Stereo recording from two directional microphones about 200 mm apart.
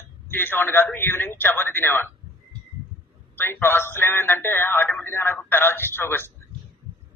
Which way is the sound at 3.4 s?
10° left (ahead or behind).